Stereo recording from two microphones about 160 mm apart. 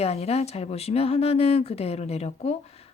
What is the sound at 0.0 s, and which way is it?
Speech, 40° left (ahead or behind).